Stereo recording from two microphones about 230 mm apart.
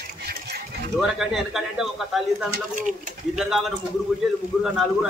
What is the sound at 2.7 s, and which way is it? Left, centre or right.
Speech, right.